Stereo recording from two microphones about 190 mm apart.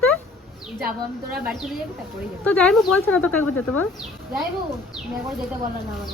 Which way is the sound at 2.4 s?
5° left (ahead or behind).